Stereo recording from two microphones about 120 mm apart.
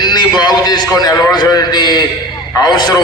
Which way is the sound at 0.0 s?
35° left (ahead or behind).